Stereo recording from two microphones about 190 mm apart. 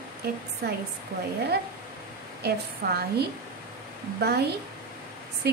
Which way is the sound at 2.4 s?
55° right (ahead or behind).